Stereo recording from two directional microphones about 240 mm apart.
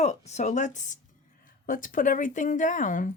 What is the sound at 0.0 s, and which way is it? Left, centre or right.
A woman's voice, left.